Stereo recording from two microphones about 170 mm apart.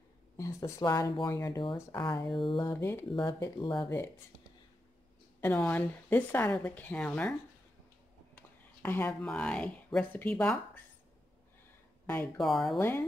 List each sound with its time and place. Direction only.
0.4 s speech: 20° left (ahead or behind)
1.8 s a woman's voice: 15° left (ahead or behind)
2.3 s speech: 30° left (ahead or behind)
2.6 s a woman's voice: 15° left (ahead or behind)
5.4 s a woman's voice: 10° left (ahead or behind)
8.4 s a woman's voice: 10° left (ahead or behind)
12.4 s speech: centre (ahead or behind)
12.7 s a woman's voice: 15° left (ahead or behind)